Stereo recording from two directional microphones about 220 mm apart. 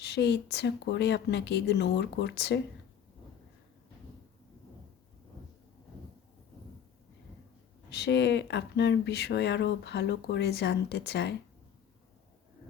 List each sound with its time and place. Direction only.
0.0 s speech: 50° left (ahead or behind)
7.9 s speech: 50° left (ahead or behind)